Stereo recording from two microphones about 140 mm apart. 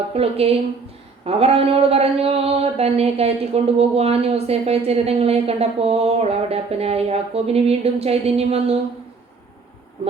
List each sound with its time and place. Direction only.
0.1 s speech: 45° right (ahead or behind)